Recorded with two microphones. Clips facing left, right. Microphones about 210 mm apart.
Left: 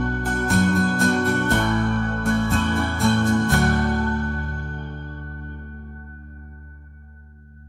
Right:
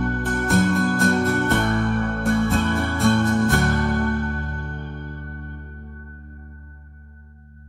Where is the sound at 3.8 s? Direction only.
30° left (ahead or behind).